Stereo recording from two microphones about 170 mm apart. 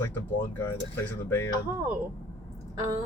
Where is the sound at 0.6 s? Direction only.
10° left (ahead or behind).